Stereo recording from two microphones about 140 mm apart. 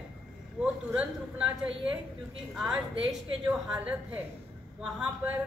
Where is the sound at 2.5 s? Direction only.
5° right (ahead or behind).